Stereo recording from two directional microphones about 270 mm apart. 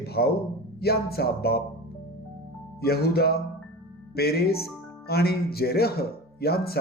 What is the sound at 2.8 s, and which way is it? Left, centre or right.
Speech, left.